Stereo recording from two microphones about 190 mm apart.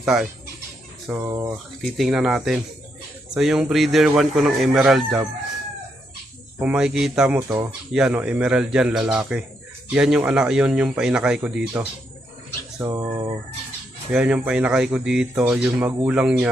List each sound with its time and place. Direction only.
0.0 s speech: centre (ahead or behind)
1.2 s speech: 20° right (ahead or behind)
1.8 s speech: centre (ahead or behind)
6.6 s speech: 5° right (ahead or behind)
12.8 s speech: 15° right (ahead or behind)
14.1 s speech: 5° right (ahead or behind)